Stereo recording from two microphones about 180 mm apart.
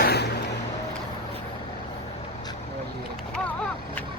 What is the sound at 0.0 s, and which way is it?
Music, 60° left (ahead or behind).